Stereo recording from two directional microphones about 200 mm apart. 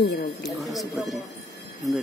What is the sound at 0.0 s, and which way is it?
Speech, 55° left (ahead or behind).